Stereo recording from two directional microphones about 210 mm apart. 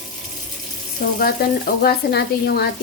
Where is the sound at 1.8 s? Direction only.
50° left (ahead or behind).